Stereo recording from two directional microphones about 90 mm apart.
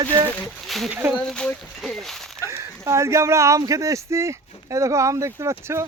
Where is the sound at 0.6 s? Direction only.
Centre (ahead or behind).